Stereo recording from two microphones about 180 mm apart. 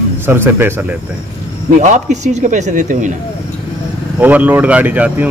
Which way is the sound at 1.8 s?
45° right (ahead or behind).